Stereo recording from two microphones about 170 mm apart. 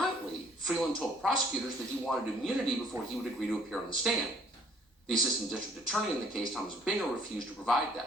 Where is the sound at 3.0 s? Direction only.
15° right (ahead or behind).